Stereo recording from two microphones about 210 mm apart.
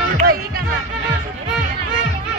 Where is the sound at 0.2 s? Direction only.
45° right (ahead or behind).